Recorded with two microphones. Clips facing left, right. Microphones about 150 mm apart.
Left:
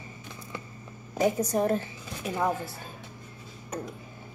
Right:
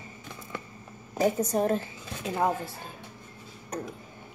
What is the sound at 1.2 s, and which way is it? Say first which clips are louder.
Speech: even; 15° left (ahead or behind).